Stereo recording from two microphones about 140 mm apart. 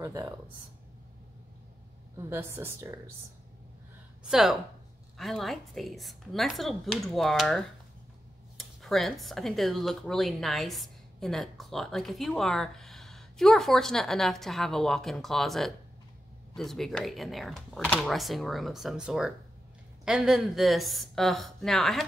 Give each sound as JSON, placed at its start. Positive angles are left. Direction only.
{"t": 0.0, "sound": "speech", "side_deg": -25}
{"t": 2.1, "sound": "speech", "side_deg": -15}
{"t": 4.2, "sound": "speech", "side_deg": -5}